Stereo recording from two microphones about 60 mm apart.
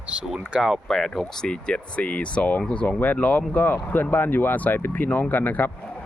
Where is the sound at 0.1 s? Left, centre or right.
Centre.